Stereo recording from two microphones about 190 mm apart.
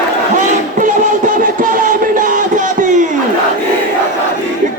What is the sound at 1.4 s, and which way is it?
Crowd, 45° right (ahead or behind).